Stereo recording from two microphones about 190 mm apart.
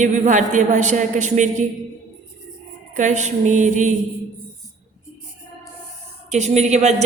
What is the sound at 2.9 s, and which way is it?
A man's voice, 40° right (ahead or behind).